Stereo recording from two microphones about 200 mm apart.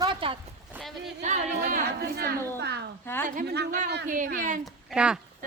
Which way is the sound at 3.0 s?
10° left (ahead or behind).